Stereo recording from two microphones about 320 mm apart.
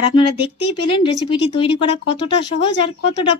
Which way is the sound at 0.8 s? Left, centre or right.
Centre.